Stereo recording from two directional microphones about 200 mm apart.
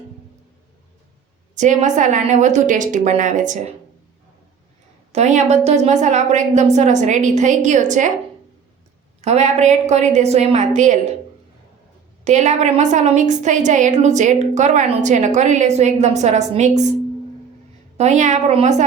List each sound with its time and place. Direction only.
1.5 s a woman's voice: 35° right (ahead or behind)
5.1 s a woman's voice: 35° right (ahead or behind)
9.2 s a woman's voice: 35° right (ahead or behind)
12.2 s a woman's voice: 35° right (ahead or behind)
17.9 s a woman's voice: 35° right (ahead or behind)